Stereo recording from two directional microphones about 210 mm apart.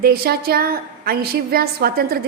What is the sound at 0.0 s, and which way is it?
A woman's voice, 45° right (ahead or behind).